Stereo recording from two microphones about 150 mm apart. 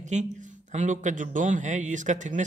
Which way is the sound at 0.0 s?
55° right (ahead or behind).